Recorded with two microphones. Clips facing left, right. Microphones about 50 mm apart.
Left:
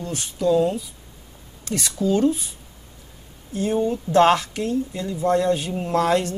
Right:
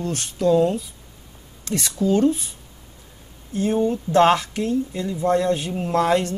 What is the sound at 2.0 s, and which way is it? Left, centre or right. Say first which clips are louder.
Speech: right 1 dB; right.